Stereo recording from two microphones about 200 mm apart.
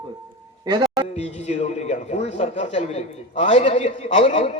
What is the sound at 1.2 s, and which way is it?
A man's voice, 30° left (ahead or behind).